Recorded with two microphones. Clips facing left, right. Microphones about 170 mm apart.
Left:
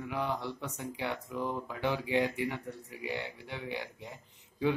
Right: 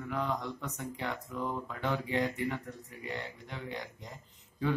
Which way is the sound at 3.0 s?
75° left (ahead or behind).